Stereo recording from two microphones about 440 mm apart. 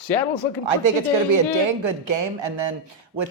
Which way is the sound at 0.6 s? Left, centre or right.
Right.